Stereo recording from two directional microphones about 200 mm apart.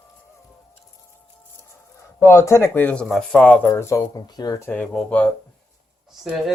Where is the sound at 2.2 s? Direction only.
15° left (ahead or behind).